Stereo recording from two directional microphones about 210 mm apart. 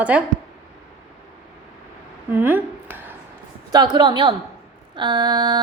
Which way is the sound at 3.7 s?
20° right (ahead or behind).